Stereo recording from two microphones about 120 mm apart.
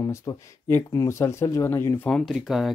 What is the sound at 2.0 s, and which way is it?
Speech, 5° left (ahead or behind).